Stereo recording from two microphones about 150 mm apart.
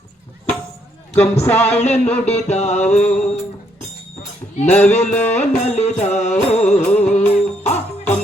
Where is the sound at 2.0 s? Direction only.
10° left (ahead or behind).